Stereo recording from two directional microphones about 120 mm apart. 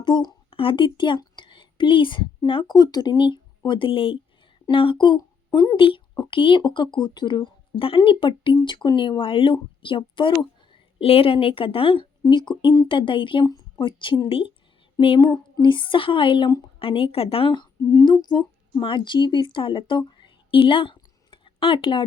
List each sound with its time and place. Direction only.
0.0 s a woman's voice: 40° left (ahead or behind)